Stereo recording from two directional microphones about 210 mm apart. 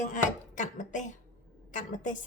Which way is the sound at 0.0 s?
35° left (ahead or behind).